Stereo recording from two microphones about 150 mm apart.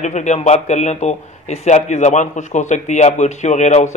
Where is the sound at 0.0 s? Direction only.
50° left (ahead or behind).